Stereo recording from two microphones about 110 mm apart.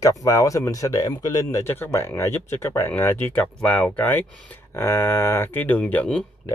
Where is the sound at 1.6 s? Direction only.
20° left (ahead or behind).